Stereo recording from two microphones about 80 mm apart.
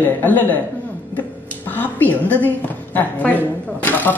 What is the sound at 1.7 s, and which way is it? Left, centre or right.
A woman's voice, left.